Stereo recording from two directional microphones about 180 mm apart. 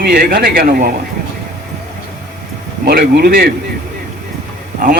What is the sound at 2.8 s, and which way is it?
Speech, 60° right (ahead or behind).